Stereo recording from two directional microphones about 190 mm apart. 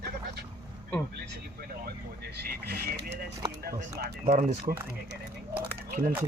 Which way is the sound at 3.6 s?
55° right (ahead or behind).